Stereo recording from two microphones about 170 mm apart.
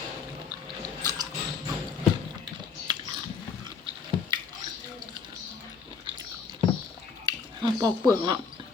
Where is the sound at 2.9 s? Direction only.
25° right (ahead or behind).